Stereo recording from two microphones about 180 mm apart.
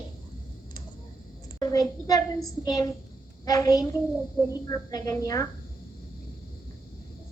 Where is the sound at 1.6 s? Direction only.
20° left (ahead or behind).